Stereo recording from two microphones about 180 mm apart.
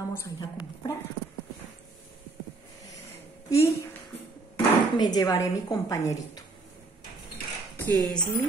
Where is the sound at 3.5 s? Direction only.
15° left (ahead or behind).